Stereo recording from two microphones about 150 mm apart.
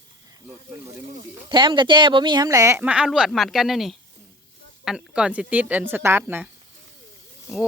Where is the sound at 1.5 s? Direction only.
30° right (ahead or behind).